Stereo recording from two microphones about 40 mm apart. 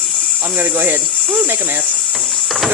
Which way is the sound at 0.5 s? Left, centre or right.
Right.